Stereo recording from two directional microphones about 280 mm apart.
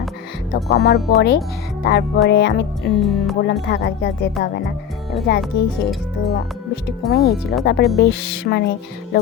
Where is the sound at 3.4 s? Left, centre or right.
Left.